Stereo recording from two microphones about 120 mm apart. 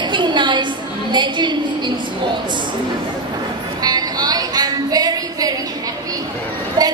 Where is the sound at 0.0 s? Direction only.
40° right (ahead or behind).